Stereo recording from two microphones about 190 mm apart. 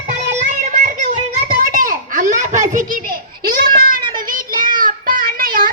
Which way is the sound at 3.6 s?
50° right (ahead or behind).